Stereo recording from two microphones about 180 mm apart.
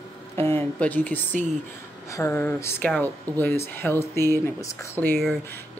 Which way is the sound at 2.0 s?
15° left (ahead or behind).